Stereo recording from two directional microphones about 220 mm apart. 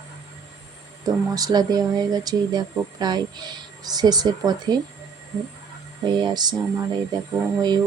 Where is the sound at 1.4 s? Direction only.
15° right (ahead or behind).